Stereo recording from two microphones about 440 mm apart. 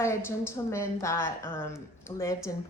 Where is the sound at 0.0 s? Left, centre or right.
Centre.